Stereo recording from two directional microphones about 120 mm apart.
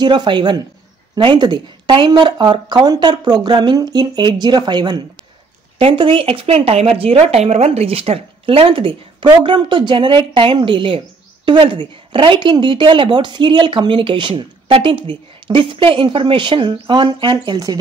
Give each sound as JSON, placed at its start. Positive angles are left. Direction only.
{"t": 0.0, "sound": "speech", "side_deg": -40}
{"t": 5.8, "sound": "a woman's voice", "side_deg": -50}